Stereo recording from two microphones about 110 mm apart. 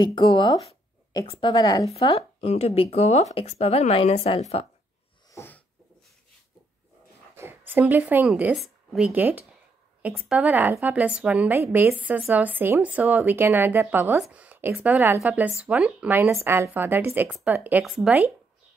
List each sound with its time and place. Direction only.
0.0 s a woman's voice: 45° left (ahead or behind)
2.0 s speech: 60° left (ahead or behind)
5.3 s a sound: 20° left (ahead or behind)
7.3 s a sound: 20° right (ahead or behind)
8.5 s a woman's voice: 5° right (ahead or behind)
17.8 s speech: centre (ahead or behind)